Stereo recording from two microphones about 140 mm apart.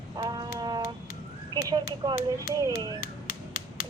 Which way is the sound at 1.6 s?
30° right (ahead or behind).